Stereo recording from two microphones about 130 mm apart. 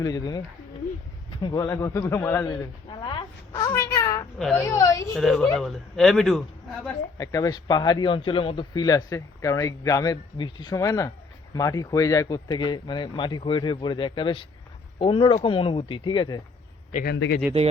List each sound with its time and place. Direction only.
0.0 s speech: 30° left (ahead or behind)
1.6 s a man's voice: 20° left (ahead or behind)
2.9 s a sound: 40° left (ahead or behind)
3.5 s a sound: 25° left (ahead or behind)
4.4 s speech: 5° left (ahead or behind)
4.6 s a man's voice: 25° left (ahead or behind)
5.1 s speech: centre (ahead or behind)
7.2 s speech: 25° left (ahead or behind)
10.8 s a man's voice: 25° left (ahead or behind)
16.9 s a man's voice: 90° left